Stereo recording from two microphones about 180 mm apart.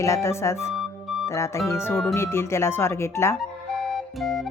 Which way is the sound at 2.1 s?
15° left (ahead or behind).